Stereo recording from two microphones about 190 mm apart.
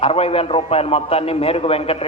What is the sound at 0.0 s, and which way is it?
A man's voice, 30° left (ahead or behind).